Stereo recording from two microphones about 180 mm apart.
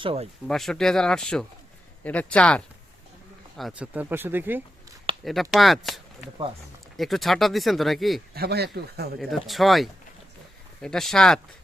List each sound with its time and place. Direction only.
0.0 s speech: 30° right (ahead or behind)
0.4 s speech: centre (ahead or behind)
3.6 s speech: 5° right (ahead or behind)
5.2 s speech: centre (ahead or behind)
8.4 s speech: 65° right (ahead or behind)
9.3 s speech: centre (ahead or behind)